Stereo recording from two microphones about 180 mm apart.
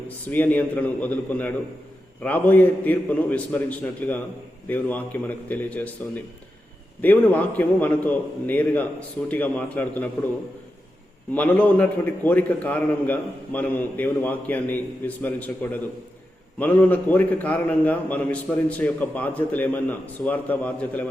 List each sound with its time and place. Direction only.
0.3 s a man's voice: 10° left (ahead or behind)
7.0 s a man's voice: 10° left (ahead or behind)
11.3 s a man's voice: 10° left (ahead or behind)